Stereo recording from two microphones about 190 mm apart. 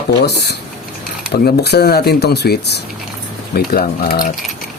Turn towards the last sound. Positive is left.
turn(degrees=50)  # may be behind; listen again after turning